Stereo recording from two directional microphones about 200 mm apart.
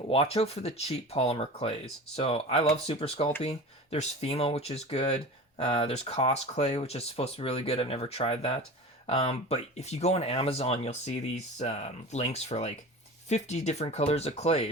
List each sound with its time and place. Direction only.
0.1 s speech: 30° left (ahead or behind)